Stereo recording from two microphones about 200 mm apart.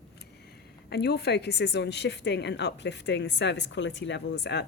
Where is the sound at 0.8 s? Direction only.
55° left (ahead or behind).